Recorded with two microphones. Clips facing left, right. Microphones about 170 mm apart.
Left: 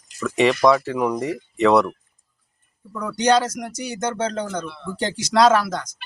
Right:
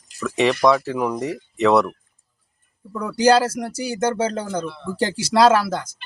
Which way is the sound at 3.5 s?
30° right (ahead or behind).